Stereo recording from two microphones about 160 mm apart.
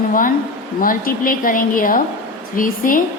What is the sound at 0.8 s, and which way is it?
A woman's voice, 60° left (ahead or behind).